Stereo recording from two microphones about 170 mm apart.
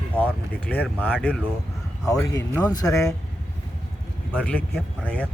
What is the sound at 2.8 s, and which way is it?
Speech, 20° left (ahead or behind).